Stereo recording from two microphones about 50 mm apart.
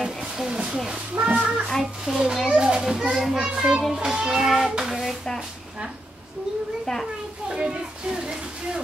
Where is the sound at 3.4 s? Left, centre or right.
Centre.